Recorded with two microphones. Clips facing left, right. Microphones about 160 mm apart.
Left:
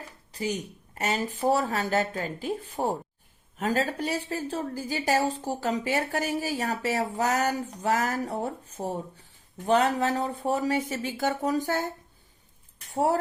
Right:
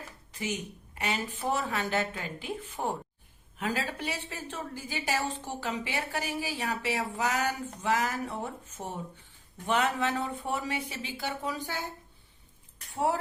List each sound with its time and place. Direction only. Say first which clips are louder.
0.3 s a woman's voice: left 4 dB; 35° left (ahead or behind)
12.9 s speech: left 4 dB; 40° left (ahead or behind)